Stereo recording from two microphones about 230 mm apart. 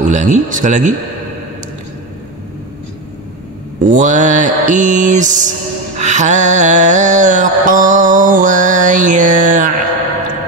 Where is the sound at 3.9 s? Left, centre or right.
Right.